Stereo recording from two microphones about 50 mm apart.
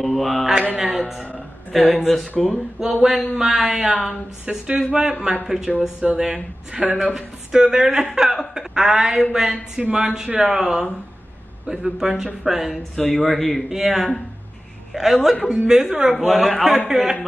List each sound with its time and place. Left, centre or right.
0.0 s a woman's voice: centre
2.8 s a woman's voice: centre
13.7 s a woman's voice: centre